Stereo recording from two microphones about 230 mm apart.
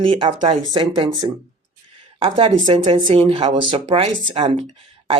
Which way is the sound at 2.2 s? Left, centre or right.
Right.